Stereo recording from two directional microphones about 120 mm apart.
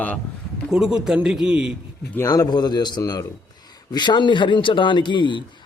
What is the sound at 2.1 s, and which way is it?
A man's voice, 25° left (ahead or behind).